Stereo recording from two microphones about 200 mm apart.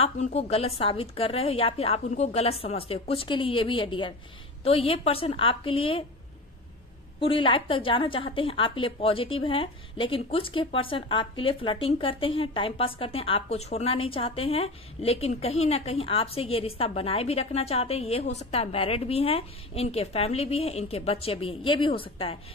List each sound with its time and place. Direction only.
0.0 s a woman's voice: 30° left (ahead or behind)
7.2 s a woman's voice: 25° left (ahead or behind)